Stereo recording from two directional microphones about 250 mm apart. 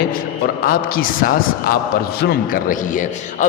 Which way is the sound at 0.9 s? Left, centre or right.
Left.